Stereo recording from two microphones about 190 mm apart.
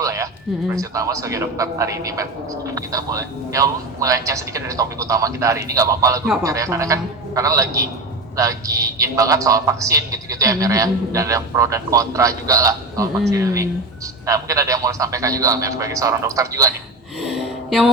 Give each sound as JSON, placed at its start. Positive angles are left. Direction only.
{"t": 0.0, "sound": "a sound", "side_deg": -15}
{"t": 0.7, "sound": "a man's voice", "side_deg": -15}
{"t": 17.2, "sound": "music", "side_deg": 0}